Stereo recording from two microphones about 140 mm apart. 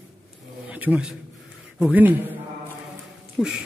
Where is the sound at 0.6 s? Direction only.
10° right (ahead or behind).